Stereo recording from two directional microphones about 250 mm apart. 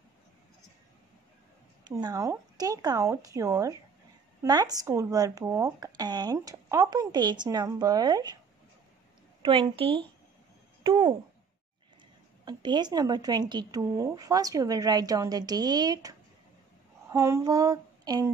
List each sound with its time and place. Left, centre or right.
1.9 s speech: centre
9.4 s a woman's voice: centre
12.4 s speech: centre
17.1 s a sound: centre